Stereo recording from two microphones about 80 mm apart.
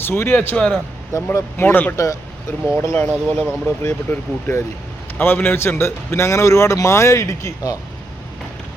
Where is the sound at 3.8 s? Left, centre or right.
Left.